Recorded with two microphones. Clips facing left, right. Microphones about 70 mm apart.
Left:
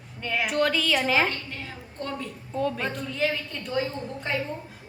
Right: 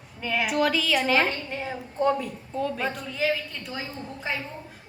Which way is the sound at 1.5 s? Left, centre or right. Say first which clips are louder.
Right 6 dB; right.